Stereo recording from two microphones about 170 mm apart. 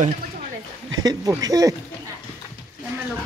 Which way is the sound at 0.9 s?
20° right (ahead or behind).